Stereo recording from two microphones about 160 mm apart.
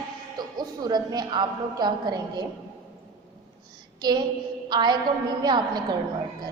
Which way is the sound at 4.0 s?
25° right (ahead or behind).